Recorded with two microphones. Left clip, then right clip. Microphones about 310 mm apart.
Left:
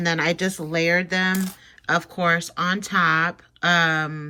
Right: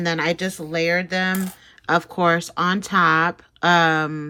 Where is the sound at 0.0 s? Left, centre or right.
Centre.